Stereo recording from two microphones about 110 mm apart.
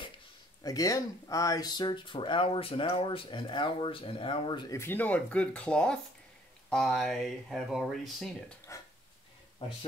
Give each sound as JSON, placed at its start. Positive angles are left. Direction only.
{"t": 0.7, "sound": "speech", "side_deg": 35}
{"t": 4.6, "sound": "speech", "side_deg": 20}
{"t": 9.6, "sound": "speech", "side_deg": 55}